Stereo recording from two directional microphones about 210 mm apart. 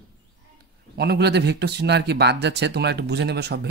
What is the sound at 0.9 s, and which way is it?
Speech, 50° right (ahead or behind).